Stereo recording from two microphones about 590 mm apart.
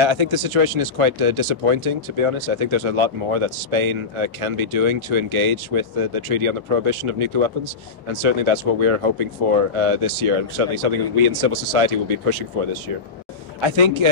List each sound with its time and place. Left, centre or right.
0.0 s speech: right
13.6 s speech: right